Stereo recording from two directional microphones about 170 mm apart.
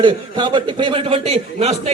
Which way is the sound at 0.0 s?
30° right (ahead or behind).